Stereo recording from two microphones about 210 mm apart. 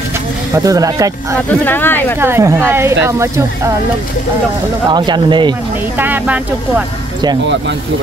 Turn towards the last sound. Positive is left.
turn(degrees=-10)  # may be behind; listen again after turning